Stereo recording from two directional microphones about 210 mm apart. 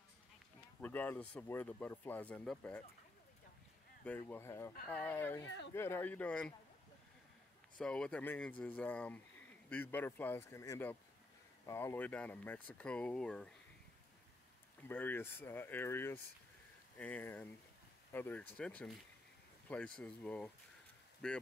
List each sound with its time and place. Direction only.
0.7 s speech: 10° left (ahead or behind)
4.0 s speech: 5° left (ahead or behind)
7.8 s speech: 5° left (ahead or behind)
14.8 s speech: 10° left (ahead or behind)